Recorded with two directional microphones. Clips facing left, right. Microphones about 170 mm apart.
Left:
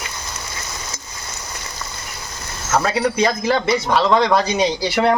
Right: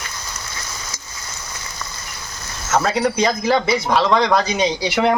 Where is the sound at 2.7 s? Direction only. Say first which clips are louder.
Even; centre (ahead or behind).